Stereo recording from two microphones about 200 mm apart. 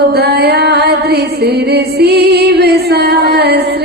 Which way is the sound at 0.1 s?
55° right (ahead or behind).